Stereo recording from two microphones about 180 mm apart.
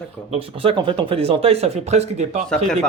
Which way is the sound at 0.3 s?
30° right (ahead or behind).